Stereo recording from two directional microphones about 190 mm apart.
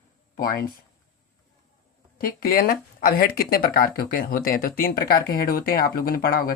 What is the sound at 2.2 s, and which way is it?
Speech, 50° left (ahead or behind).